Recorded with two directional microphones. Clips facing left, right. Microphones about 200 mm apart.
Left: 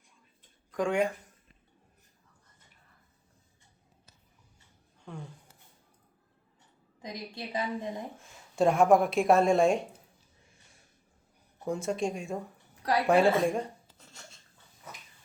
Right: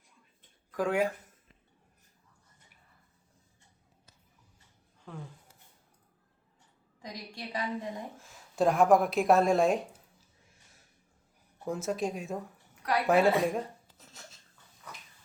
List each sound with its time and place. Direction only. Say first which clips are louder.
0.7 s speech: left 1 dB; 5° right (ahead or behind)
5.1 s speech: left 1 dB; centre (ahead or behind)
7.0 s a woman's voice: left 3 dB; 25° left (ahead or behind)
8.1 s a woman's voice: left 1 dB; centre (ahead or behind)
11.6 s speech: left 1 dB; centre (ahead or behind)
13.4 s a sound: left 2 dB; centre (ahead or behind)